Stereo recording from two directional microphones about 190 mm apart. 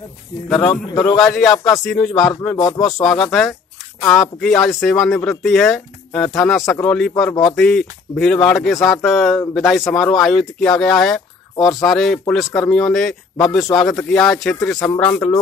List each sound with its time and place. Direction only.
0.5 s speech: 5° left (ahead or behind)
0.8 s speech: 20° left (ahead or behind)
1.2 s speech: centre (ahead or behind)